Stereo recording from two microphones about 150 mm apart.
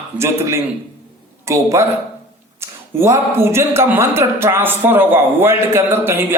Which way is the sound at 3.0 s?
15° right (ahead or behind).